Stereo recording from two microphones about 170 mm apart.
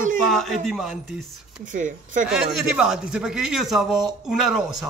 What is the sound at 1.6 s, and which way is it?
Speech, 50° right (ahead or behind).